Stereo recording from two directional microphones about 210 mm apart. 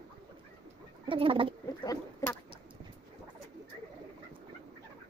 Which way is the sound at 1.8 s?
15° left (ahead or behind).